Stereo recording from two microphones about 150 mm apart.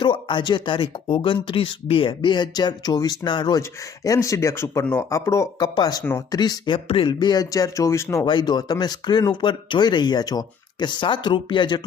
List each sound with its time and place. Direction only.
0.0 s speech: 30° left (ahead or behind)